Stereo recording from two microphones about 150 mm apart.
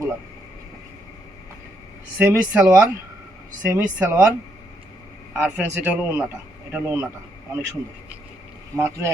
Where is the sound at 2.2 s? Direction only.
10° right (ahead or behind).